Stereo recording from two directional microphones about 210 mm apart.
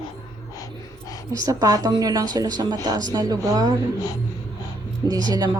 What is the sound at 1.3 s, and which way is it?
A woman's voice, 15° right (ahead or behind).